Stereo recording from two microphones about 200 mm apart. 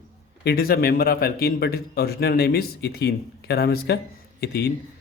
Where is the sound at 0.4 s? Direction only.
50° left (ahead or behind).